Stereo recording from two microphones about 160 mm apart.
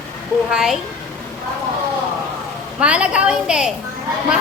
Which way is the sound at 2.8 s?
5° right (ahead or behind).